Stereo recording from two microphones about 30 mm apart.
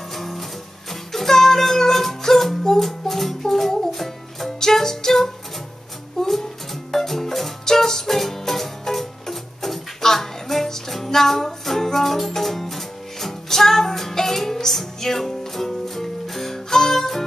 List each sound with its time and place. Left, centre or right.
0.1 s music: centre